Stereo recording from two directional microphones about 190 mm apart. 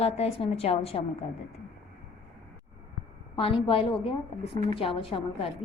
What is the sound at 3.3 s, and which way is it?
A woman's voice, 30° left (ahead or behind).